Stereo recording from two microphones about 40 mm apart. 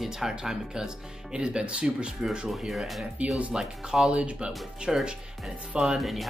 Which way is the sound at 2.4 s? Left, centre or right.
Centre.